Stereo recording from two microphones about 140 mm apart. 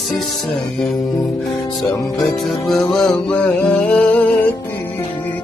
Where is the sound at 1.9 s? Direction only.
25° left (ahead or behind).